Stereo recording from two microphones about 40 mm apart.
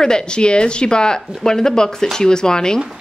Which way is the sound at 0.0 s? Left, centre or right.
Centre.